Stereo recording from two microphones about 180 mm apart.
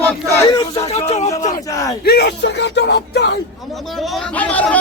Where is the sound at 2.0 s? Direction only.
65° left (ahead or behind).